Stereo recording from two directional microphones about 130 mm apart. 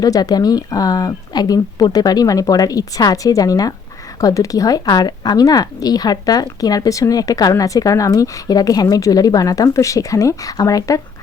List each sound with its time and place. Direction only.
0.0 s a woman's voice: 30° left (ahead or behind)